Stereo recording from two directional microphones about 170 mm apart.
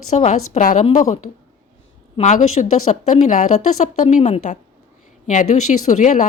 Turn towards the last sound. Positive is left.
turn(degrees=45)  # may be behind; listen again after turning